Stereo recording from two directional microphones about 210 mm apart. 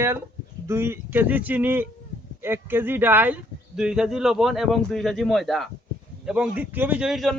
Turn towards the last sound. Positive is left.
turn(degrees=0)  # may be behind; listen again after turning